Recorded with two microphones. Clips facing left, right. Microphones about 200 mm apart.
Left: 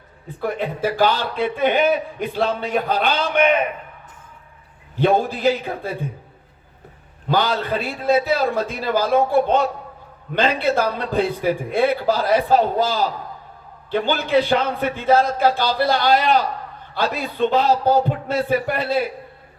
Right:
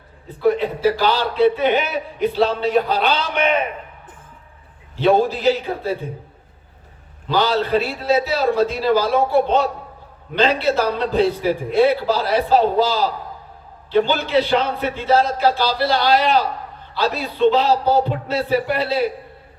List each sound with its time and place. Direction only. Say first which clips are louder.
0.3 s a man's voice: right 6 dB; 50° left (ahead or behind)
4.9 s a man's voice: right 2 dB; 50° left (ahead or behind)
7.3 s a man's voice: right 2 dB; 50° left (ahead or behind)
14.1 s a man's voice: even; 50° left (ahead or behind)